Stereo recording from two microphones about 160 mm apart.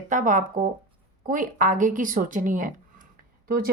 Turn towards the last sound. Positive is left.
turn(degrees=-60)  # may be behind; listen again after turning